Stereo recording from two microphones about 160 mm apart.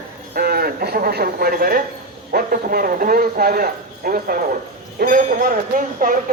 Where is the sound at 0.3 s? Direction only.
70° right (ahead or behind).